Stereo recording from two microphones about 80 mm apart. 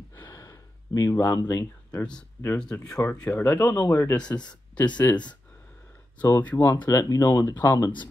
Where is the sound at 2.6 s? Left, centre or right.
Centre.